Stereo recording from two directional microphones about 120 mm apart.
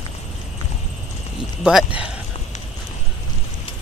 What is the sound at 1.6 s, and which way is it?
Speech, 5° right (ahead or behind).